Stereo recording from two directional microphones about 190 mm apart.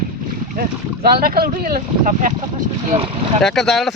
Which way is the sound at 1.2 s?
50° right (ahead or behind).